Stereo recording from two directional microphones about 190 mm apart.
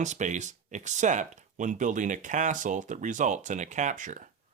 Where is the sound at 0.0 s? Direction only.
40° right (ahead or behind).